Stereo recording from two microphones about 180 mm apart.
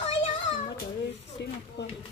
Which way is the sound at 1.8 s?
75° left (ahead or behind).